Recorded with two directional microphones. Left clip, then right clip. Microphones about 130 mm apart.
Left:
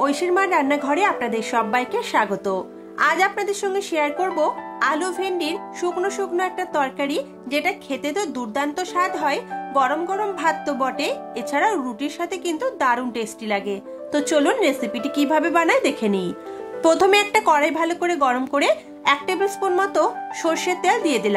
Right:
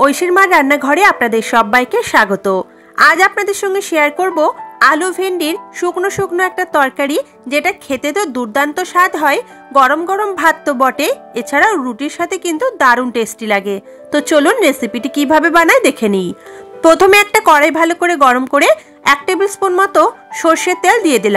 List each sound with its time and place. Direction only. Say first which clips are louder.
0.0 s speech: right 10 dB; 55° right (ahead or behind)